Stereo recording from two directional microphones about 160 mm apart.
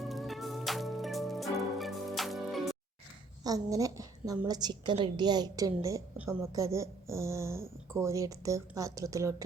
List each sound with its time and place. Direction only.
0.0 s music: centre (ahead or behind)
3.4 s speech: 20° right (ahead or behind)